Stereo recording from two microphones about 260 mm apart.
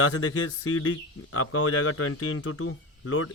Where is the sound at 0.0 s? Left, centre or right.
Left.